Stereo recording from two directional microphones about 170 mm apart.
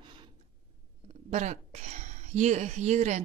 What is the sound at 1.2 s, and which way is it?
A woman's voice, 45° right (ahead or behind).